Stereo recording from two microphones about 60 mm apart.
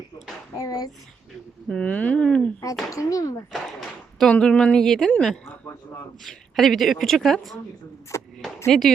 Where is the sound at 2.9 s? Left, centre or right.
Left.